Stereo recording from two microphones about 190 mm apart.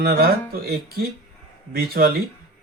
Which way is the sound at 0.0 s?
55° right (ahead or behind).